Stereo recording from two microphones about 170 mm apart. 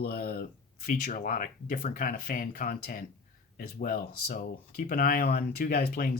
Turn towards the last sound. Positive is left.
turn(degrees=60)  # may be behind; listen again after turning